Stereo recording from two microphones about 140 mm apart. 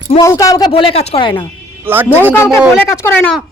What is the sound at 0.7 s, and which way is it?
Speech, 40° left (ahead or behind).